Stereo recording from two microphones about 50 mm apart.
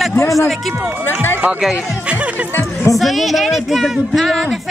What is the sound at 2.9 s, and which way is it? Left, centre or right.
A woman's voice, centre.